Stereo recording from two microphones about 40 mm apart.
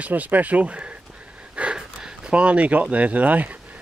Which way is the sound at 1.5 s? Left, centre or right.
Right.